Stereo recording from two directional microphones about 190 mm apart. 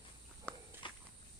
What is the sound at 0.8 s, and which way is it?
Walk, 25° left (ahead or behind).